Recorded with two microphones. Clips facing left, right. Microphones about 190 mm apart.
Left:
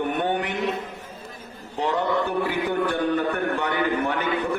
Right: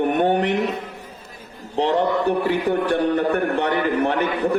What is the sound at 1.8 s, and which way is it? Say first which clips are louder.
A man's voice: right 4 dB; 35° right (ahead or behind).